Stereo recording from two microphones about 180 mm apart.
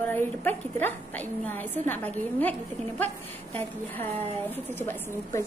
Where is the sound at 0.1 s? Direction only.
10° left (ahead or behind).